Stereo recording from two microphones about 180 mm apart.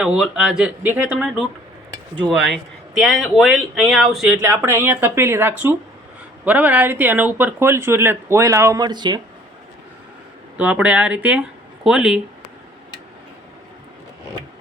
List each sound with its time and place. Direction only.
0.0 s speech: 5° right (ahead or behind)
1.9 s a sound: 25° right (ahead or behind)
3.0 s speech: centre (ahead or behind)
4.4 s speech: 15° right (ahead or behind)
10.6 s speech: 5° right (ahead or behind)